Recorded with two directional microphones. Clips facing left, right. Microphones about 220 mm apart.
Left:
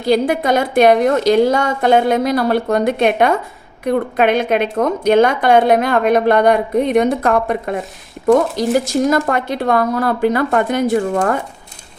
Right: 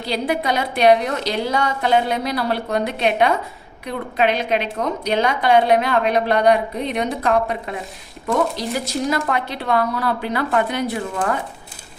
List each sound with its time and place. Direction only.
0.0 s a woman's voice: 50° left (ahead or behind)